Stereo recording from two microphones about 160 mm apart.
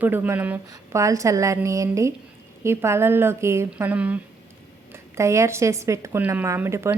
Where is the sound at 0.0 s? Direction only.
10° right (ahead or behind).